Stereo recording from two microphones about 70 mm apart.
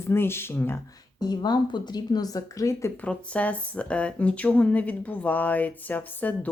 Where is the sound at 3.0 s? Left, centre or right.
Centre.